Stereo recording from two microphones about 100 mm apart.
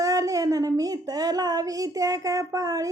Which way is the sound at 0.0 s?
35° right (ahead or behind).